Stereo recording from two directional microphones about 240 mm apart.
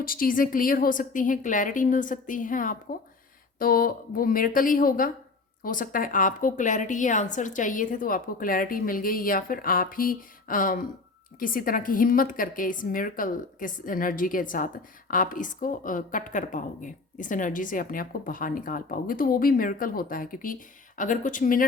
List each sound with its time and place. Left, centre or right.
0.0 s a woman's voice: left